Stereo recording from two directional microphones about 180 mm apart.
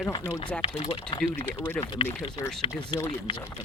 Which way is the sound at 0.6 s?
30° left (ahead or behind).